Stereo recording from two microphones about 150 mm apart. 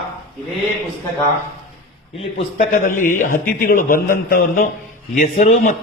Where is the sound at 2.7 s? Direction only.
60° left (ahead or behind).